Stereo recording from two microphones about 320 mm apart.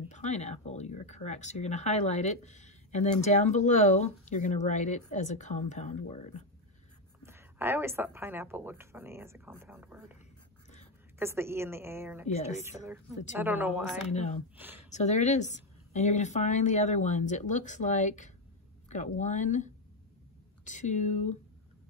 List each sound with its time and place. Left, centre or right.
0.1 s speech: left
7.2 s speech: centre
11.1 s speech: centre
14.1 s speech: centre
14.6 s speech: centre
14.9 s speech: left